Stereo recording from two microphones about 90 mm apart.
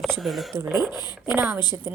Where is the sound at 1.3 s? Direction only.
20° right (ahead or behind).